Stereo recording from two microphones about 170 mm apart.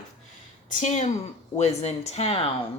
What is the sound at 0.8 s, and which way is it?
Speech, 45° left (ahead or behind).